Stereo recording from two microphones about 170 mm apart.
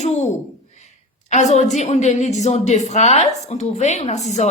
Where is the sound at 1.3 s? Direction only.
45° left (ahead or behind).